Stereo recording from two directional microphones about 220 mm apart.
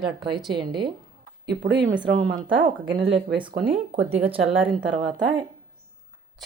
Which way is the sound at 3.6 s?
25° right (ahead or behind).